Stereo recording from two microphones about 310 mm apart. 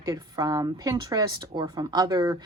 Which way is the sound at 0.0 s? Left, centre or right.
Centre.